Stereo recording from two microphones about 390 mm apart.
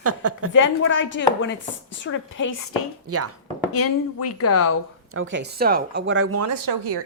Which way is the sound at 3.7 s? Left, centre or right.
Left.